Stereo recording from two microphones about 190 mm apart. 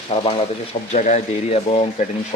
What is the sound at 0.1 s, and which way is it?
Speech, 30° left (ahead or behind).